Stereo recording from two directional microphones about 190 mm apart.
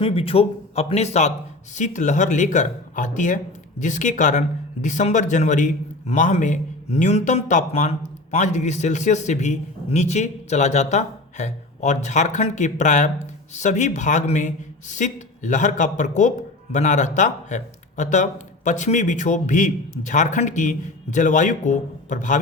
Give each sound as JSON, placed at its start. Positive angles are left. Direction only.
{"t": 0.0, "sound": "speech", "side_deg": 30}